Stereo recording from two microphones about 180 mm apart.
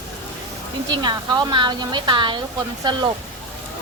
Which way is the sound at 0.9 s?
25° right (ahead or behind).